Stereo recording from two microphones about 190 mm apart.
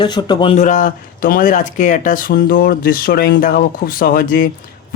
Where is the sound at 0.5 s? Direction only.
40° left (ahead or behind).